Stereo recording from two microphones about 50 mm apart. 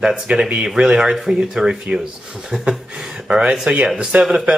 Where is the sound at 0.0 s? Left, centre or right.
Centre.